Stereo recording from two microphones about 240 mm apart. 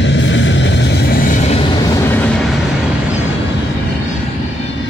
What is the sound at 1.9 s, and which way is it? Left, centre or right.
Vehicle, centre.